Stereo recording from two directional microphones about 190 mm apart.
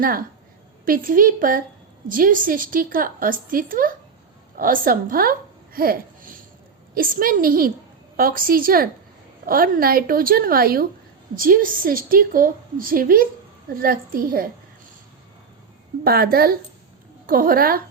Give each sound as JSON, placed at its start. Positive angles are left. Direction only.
{"t": 0.0, "sound": "a woman's voice", "side_deg": -50}
{"t": 5.7, "sound": "a sound", "side_deg": -50}
{"t": 6.9, "sound": "a woman's voice", "side_deg": -50}
{"t": 16.0, "sound": "a woman's voice", "side_deg": -55}